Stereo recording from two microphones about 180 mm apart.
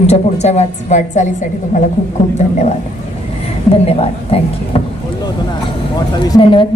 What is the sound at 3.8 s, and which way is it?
A woman's voice, 35° left (ahead or behind).